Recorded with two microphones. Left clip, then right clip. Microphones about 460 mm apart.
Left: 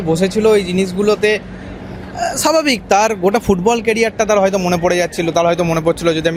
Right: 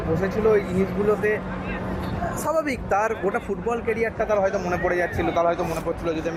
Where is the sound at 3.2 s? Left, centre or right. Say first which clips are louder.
Left 11 dB; left.